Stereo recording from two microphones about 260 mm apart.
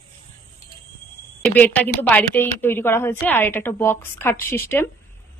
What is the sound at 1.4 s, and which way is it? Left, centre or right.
Speech, centre.